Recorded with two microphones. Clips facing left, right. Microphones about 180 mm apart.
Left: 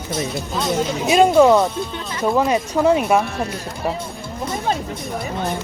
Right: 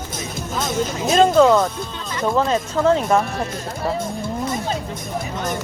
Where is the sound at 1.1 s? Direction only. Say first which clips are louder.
Left 1 dB; 15° left (ahead or behind).